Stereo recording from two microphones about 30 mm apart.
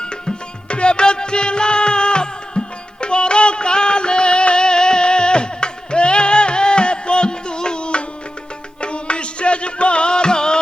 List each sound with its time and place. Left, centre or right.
0.0 s music: left